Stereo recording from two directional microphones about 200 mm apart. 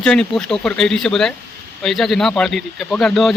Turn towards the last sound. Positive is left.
turn(degrees=0)  # may be behind; listen again after turning